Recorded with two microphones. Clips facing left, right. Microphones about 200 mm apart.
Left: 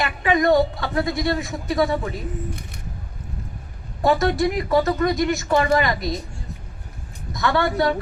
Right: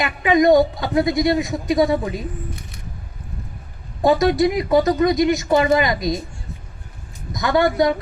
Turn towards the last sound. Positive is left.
turn(degrees=-15)  # may be behind; listen again after turning